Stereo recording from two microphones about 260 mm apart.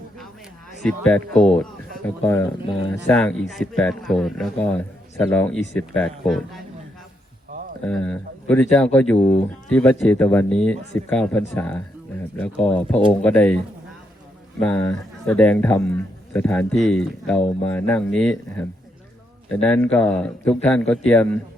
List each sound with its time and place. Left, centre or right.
0.8 s speech: centre
7.9 s speech: centre
14.6 s speech: centre
19.5 s speech: centre